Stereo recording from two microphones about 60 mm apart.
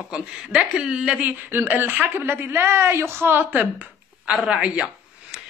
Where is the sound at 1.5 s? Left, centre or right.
Right.